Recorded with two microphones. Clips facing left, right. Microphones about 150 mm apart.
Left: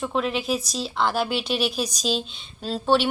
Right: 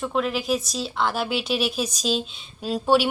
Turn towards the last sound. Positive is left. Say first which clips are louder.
# right 1 dB
turn(degrees=-10)  # may be behind; listen again after turning